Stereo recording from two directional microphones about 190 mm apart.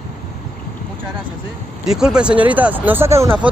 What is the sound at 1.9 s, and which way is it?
Speech, 5° right (ahead or behind).